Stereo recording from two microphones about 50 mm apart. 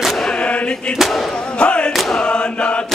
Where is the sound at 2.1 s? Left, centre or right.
Centre.